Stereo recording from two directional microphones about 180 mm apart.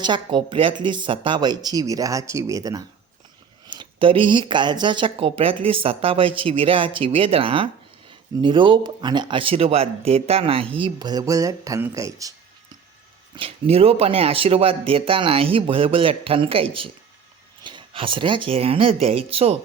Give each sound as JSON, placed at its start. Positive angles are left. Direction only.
{"t": 0.0, "sound": "speech", "side_deg": -25}
{"t": 13.3, "sound": "speech", "side_deg": -30}